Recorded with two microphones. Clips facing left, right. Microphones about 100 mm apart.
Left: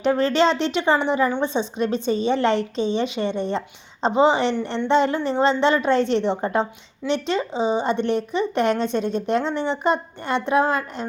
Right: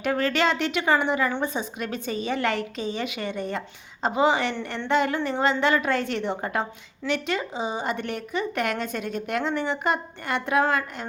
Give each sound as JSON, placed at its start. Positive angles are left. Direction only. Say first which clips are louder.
{"t": 0.0, "sound": "speech", "louder": "left 5 dB", "side_deg": 25}